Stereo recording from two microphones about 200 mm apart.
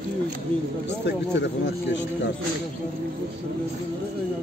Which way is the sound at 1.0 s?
60° left (ahead or behind).